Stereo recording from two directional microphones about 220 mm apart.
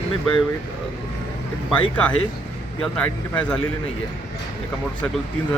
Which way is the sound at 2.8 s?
5° left (ahead or behind).